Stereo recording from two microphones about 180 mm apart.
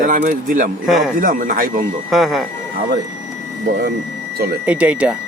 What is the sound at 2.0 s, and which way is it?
Speech, centre (ahead or behind).